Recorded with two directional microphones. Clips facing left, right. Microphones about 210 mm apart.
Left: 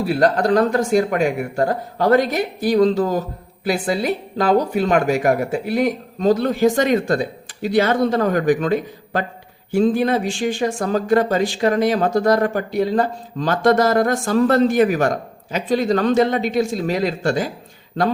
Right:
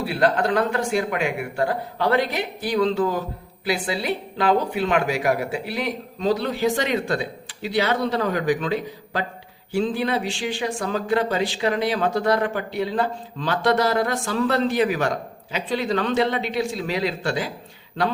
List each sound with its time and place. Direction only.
0.0 s a woman's voice: 40° left (ahead or behind)